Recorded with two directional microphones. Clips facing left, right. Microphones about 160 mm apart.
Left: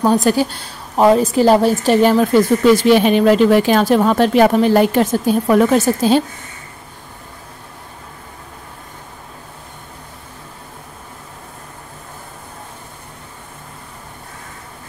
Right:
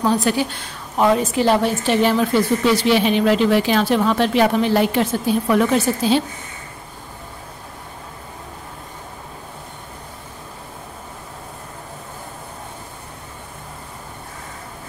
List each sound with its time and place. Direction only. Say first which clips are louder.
0.0 s a woman's voice: left 4 dB; 40° left (ahead or behind)